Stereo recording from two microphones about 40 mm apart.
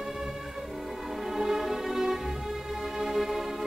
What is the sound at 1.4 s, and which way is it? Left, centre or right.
Music, centre.